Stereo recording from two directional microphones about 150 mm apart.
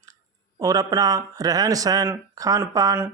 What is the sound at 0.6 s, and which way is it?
Speech, 25° right (ahead or behind).